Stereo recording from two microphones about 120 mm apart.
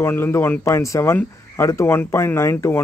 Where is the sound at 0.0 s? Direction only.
20° left (ahead or behind).